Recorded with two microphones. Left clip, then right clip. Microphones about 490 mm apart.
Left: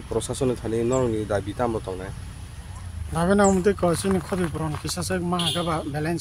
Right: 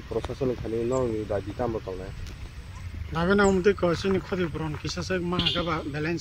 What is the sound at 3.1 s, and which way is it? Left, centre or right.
Speech, right.